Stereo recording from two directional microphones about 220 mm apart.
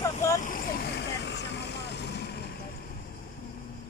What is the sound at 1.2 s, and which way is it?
Vehicle, 50° left (ahead or behind).